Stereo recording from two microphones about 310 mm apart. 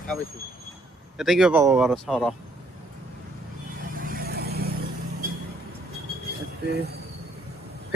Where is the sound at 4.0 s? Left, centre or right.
Right.